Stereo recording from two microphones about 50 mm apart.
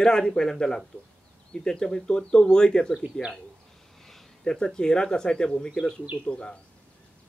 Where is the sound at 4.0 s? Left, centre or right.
Centre.